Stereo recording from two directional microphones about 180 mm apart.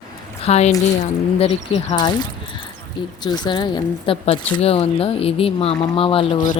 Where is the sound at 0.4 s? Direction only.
35° left (ahead or behind).